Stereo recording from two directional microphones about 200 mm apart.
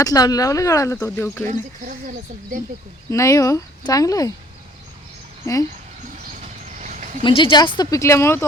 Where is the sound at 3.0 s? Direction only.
15° left (ahead or behind).